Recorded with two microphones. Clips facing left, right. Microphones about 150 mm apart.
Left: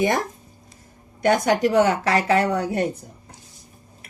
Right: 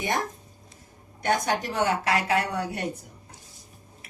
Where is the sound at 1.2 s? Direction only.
90° left.